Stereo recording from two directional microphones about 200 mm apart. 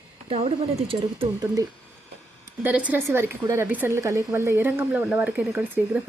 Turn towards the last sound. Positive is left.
turn(degrees=-5)  # may be behind; listen again after turning